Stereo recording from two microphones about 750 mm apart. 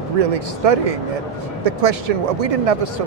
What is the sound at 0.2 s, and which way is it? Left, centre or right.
Speech, right.